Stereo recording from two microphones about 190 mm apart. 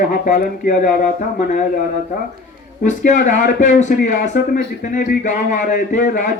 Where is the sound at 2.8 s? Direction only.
40° left (ahead or behind).